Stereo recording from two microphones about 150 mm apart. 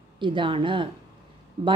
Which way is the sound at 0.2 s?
35° right (ahead or behind).